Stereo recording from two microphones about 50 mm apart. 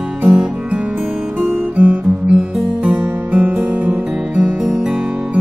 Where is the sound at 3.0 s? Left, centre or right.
Right.